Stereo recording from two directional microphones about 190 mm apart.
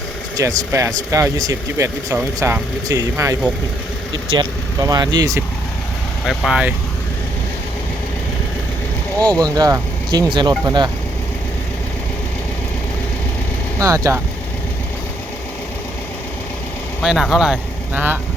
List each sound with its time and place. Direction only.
0.3 s speech: 15° right (ahead or behind)
6.2 s speech: centre (ahead or behind)
9.4 s speech: 20° right (ahead or behind)
13.7 s speech: 15° right (ahead or behind)
17.0 s speech: centre (ahead or behind)